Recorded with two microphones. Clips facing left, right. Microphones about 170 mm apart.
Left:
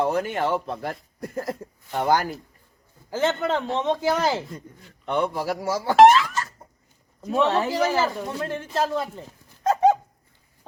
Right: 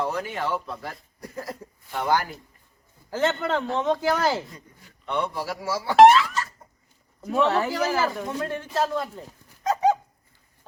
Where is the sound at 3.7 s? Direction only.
20° left (ahead or behind).